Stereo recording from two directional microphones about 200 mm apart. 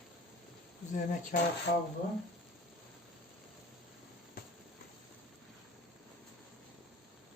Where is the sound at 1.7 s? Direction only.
50° left (ahead or behind).